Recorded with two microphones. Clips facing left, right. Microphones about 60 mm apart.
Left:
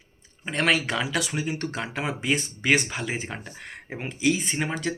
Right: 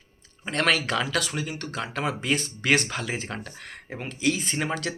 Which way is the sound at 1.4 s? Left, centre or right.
Left.